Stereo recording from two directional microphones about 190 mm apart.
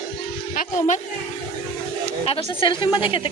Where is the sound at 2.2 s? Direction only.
30° left (ahead or behind).